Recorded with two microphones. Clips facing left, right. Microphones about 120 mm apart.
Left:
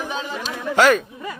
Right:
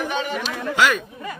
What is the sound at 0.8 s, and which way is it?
Speech, 40° left (ahead or behind).